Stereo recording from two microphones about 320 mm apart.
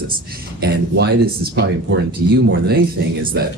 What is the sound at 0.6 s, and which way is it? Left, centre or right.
Speech, right.